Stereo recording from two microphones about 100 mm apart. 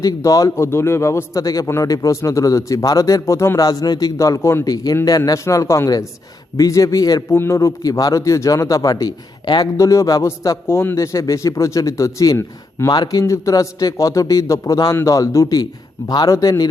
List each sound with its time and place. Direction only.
0.0 s speech: 35° left (ahead or behind)
3.6 s speech: 40° left (ahead or behind)